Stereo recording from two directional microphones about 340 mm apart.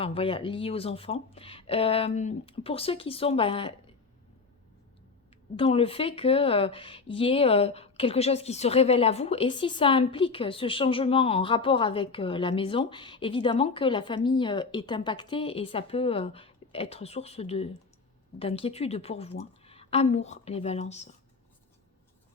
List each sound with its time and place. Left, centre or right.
0.0 s speech: centre
5.5 s speech: centre